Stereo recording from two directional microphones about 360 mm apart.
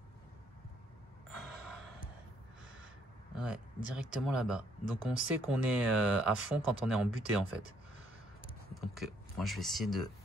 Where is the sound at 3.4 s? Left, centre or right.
Centre.